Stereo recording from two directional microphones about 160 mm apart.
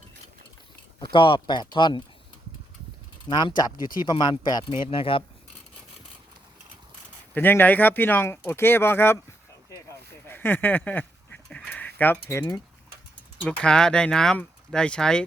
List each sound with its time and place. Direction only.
1.1 s speech: 30° left (ahead or behind)
3.2 s speech: 30° left (ahead or behind)
3.8 s speech: 60° left (ahead or behind)
4.0 s speech: 25° left (ahead or behind)
7.3 s speech: 10° left (ahead or behind)
10.2 s speech: 10° left (ahead or behind)
11.4 s a sound: 5° left (ahead or behind)
11.9 s speech: 10° left (ahead or behind)
13.4 s speech: 5° left (ahead or behind)